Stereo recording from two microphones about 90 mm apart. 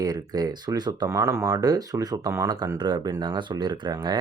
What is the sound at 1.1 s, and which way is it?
Speech, 35° right (ahead or behind).